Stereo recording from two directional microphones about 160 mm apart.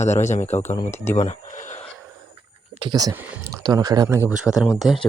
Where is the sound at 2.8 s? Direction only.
25° right (ahead or behind).